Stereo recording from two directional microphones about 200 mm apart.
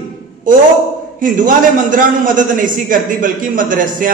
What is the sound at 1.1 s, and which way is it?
A man's voice, 40° right (ahead or behind).